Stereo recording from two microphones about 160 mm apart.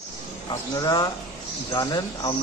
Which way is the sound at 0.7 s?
25° left (ahead or behind).